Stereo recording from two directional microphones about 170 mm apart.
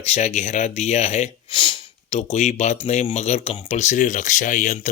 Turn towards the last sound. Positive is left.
turn(degrees=50)  # may be behind; listen again after turning